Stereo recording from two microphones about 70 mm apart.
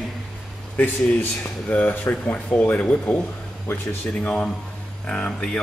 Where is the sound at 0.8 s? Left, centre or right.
Left.